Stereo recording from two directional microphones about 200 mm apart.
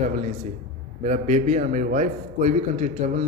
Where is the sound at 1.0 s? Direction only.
40° right (ahead or behind).